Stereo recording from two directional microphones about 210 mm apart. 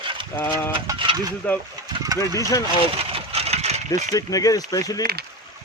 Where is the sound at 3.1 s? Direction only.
30° right (ahead or behind).